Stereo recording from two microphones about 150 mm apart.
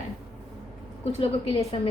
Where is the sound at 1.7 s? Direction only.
35° left (ahead or behind).